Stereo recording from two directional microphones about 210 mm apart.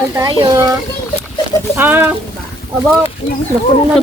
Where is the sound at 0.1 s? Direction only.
15° right (ahead or behind).